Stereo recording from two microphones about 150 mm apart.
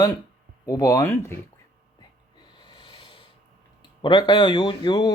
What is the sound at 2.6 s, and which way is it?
Snort, 30° left (ahead or behind).